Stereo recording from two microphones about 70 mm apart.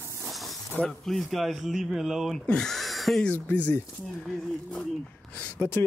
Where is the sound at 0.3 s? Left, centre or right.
Centre.